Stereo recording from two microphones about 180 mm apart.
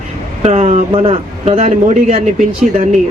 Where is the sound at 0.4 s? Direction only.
40° right (ahead or behind).